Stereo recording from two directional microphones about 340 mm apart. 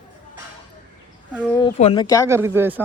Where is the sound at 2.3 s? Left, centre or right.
Centre.